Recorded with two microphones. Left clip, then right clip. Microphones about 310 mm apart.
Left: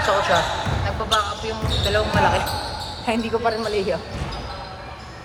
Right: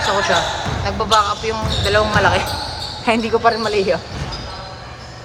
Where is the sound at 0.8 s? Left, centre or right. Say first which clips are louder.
Right 7 dB; centre.